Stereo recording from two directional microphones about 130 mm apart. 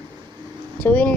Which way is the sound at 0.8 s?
15° left (ahead or behind).